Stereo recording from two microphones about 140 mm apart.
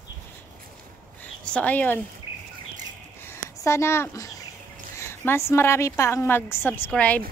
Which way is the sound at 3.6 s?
20° left (ahead or behind).